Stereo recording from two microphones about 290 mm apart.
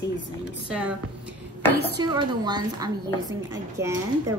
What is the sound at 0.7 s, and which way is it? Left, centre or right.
Speech, centre.